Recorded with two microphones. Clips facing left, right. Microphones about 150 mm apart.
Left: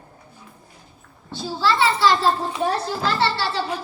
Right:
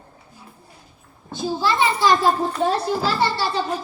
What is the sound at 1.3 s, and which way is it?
Speech, 15° right (ahead or behind).